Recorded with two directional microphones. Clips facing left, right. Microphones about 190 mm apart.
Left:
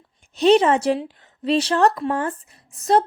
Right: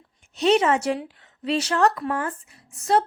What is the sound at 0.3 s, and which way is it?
A woman's voice, 35° left (ahead or behind).